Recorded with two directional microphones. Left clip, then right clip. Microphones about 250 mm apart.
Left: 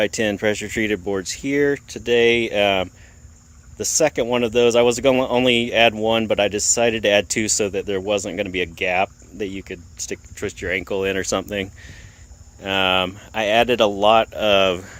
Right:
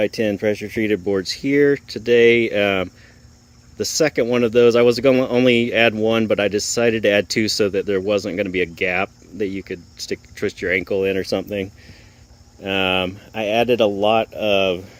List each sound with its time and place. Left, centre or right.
0.0 s speech: centre